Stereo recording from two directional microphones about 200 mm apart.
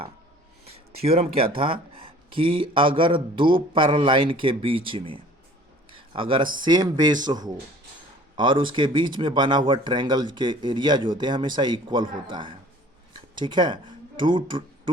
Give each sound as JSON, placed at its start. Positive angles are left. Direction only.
{"t": 1.0, "sound": "speech", "side_deg": -30}